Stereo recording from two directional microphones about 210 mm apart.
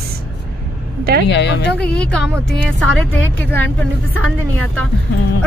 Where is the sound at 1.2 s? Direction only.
55° left (ahead or behind).